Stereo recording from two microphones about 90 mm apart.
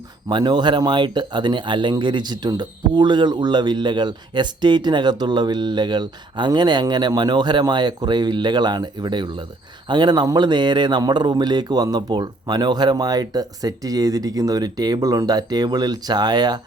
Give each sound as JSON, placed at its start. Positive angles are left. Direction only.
{"t": 0.3, "sound": "speech", "side_deg": -55}